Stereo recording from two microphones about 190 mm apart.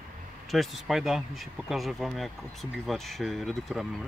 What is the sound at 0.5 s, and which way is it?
Speech, centre (ahead or behind).